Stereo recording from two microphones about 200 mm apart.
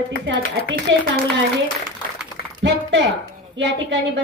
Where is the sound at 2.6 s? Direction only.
60° right (ahead or behind).